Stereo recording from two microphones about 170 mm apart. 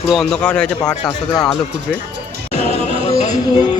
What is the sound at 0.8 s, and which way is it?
Speech, 25° left (ahead or behind).